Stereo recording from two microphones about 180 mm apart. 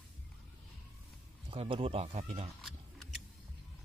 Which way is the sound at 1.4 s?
30° right (ahead or behind).